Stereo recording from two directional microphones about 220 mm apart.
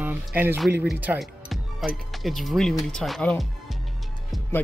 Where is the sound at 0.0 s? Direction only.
10° right (ahead or behind).